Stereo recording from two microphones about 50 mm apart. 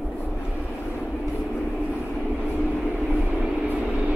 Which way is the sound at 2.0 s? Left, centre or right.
Right.